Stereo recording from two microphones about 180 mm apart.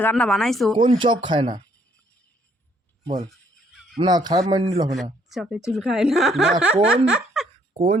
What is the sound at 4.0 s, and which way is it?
Speech, 20° right (ahead or behind).